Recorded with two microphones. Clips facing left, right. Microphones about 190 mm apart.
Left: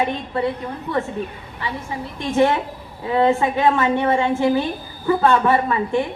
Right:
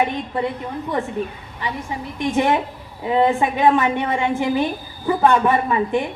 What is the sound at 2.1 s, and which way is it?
A woman's voice, 15° right (ahead or behind).